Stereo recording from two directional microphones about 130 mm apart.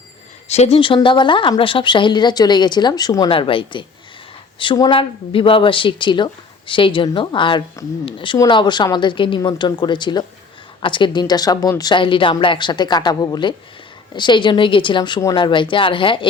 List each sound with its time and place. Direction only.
0.4 s speech: 55° left (ahead or behind)
0.8 s speech: 40° left (ahead or behind)
3.2 s a woman's voice: 45° left (ahead or behind)